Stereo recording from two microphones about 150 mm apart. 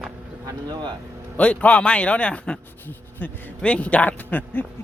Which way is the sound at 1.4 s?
10° left (ahead or behind).